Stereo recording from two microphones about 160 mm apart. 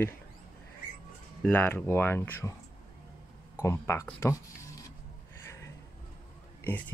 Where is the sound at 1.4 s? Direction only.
10° left (ahead or behind).